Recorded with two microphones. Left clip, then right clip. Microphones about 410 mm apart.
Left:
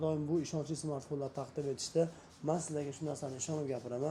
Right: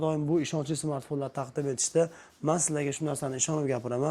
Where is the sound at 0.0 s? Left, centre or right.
Right.